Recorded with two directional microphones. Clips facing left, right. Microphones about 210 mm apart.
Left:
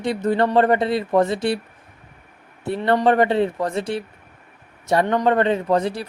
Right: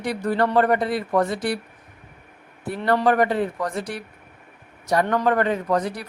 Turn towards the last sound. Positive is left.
turn(degrees=25)  # may be behind; listen again after turning